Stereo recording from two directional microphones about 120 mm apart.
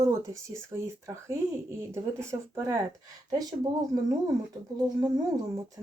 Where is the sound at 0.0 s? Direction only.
25° right (ahead or behind).